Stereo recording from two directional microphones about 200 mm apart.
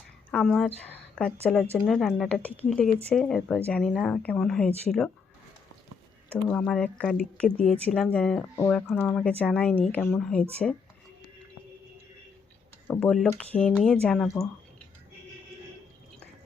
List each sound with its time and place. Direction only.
0.3 s speech: 5° left (ahead or behind)
6.5 s speech: 5° left (ahead or behind)
12.9 s speech: 5° left (ahead or behind)